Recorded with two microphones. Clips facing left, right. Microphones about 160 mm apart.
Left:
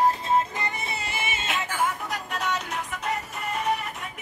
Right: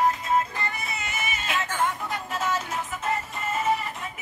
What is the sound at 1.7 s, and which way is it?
Music, centre (ahead or behind).